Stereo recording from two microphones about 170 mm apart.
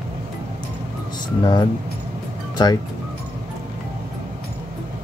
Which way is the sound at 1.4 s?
25° left (ahead or behind).